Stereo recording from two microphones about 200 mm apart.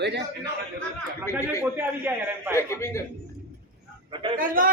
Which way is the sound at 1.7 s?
10° right (ahead or behind).